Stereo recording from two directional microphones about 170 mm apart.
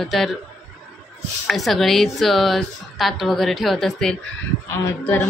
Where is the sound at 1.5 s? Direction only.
Centre (ahead or behind).